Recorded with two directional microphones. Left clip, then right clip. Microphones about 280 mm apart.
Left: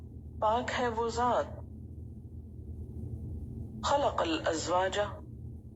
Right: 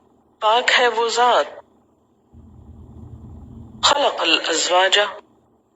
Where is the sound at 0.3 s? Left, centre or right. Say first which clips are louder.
Right 14 dB; right.